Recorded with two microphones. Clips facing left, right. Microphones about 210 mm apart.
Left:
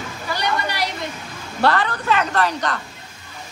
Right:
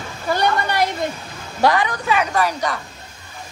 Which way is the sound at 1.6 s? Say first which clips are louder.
Right 2 dB; 10° right (ahead or behind).